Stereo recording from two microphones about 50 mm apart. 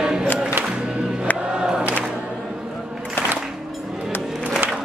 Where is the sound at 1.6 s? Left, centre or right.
Centre.